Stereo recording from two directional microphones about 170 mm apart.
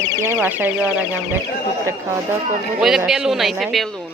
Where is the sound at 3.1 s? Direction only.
Centre (ahead or behind).